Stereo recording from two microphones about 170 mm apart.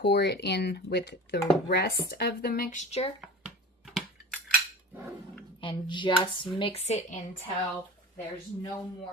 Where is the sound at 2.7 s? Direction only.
40° left (ahead or behind).